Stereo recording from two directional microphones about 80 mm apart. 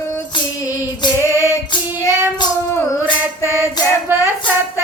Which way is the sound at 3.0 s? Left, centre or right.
Right.